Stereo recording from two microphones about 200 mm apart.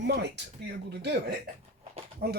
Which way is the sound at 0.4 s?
60° right (ahead or behind).